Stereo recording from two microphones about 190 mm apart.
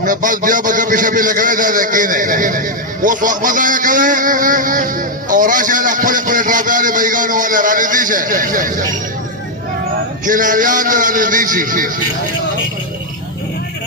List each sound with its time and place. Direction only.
0.0 s a man's voice: 45° right (ahead or behind)
10.2 s a man's voice: 45° right (ahead or behind)